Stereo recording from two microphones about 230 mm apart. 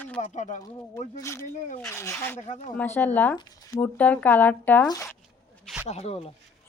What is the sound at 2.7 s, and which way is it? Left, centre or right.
Speech, centre.